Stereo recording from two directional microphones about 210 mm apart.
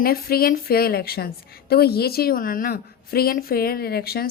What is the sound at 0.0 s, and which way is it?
A woman's voice, 45° left (ahead or behind).